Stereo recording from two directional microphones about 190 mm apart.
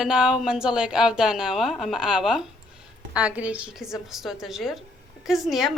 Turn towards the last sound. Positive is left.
turn(degrees=0)  # may be behind; listen again after turning